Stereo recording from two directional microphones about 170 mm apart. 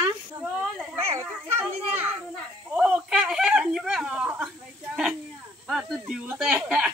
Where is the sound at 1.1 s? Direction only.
15° right (ahead or behind).